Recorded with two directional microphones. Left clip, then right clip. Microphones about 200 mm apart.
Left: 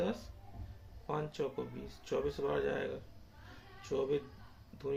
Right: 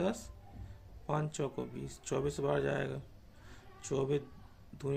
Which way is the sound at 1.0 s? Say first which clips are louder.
Right 1 dB; 40° right (ahead or behind).